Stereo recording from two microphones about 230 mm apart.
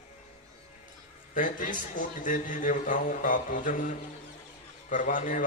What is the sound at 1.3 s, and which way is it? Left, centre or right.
A man's voice, left.